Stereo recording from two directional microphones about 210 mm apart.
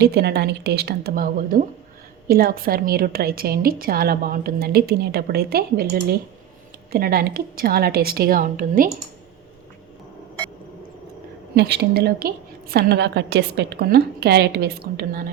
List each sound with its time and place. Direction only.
0.0 s a woman's voice: 50° right (ahead or behind)
11.5 s a woman's voice: 50° right (ahead or behind)